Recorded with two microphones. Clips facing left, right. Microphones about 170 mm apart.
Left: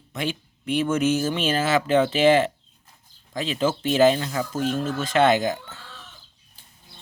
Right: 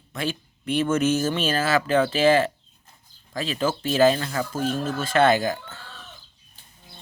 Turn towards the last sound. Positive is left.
turn(degrees=20)  # may be behind; listen again after turning